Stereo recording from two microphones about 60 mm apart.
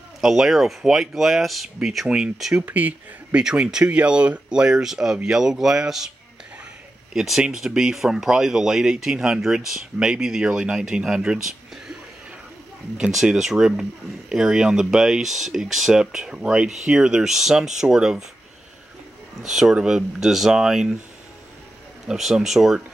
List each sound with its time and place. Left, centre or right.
0.2 s speech: centre
2.0 s speech: centre
2.6 s speech: right
3.3 s speech: centre
7.2 s speech: centre
13.1 s speech: centre
19.4 s speech: centre
22.0 s speech: centre